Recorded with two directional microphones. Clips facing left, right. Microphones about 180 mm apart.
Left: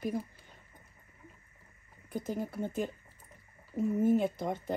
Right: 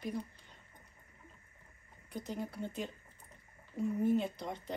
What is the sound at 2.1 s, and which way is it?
Speech, 50° left (ahead or behind).